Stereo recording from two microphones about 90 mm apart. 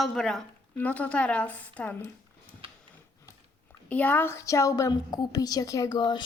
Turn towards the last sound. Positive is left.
turn(degrees=55)  # may be behind; listen again after turning